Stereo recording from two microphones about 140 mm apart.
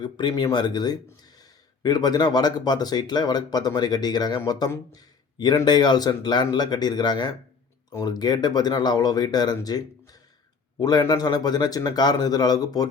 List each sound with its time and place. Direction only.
0.0 s speech: 35° left (ahead or behind)